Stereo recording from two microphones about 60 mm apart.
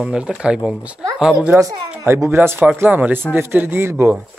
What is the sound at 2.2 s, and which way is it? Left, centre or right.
Speech, right.